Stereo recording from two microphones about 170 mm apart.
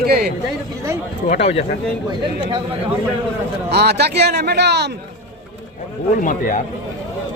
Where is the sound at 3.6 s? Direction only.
75° right (ahead or behind).